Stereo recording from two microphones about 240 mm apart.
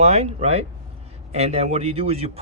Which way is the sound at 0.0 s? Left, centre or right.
Right.